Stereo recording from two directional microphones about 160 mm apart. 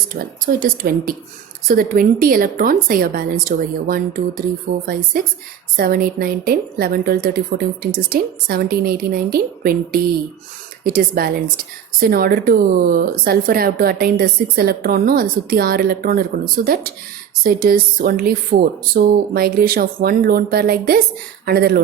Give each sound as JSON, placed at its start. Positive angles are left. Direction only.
{"t": 0.1, "sound": "a woman's voice", "side_deg": -60}